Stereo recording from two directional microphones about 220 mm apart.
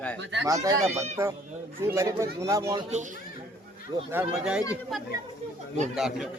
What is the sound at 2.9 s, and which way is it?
Speech, 35° right (ahead or behind).